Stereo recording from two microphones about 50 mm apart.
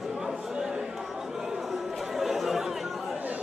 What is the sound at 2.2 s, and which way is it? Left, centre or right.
Chatter, centre.